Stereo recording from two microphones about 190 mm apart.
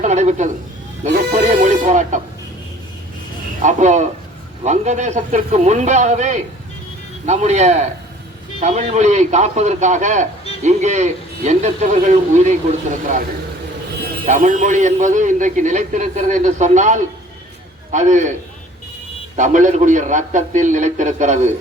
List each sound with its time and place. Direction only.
0.0 s a man's voice: 35° right (ahead or behind)
3.6 s a man's voice: 40° right (ahead or behind)
14.0 s a man's voice: 45° right (ahead or behind)
19.4 s a man's voice: 40° right (ahead or behind)